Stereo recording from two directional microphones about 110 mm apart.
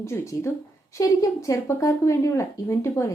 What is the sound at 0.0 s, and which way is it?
Speech, 25° left (ahead or behind).